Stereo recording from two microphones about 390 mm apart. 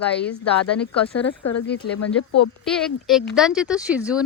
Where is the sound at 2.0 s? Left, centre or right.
Left.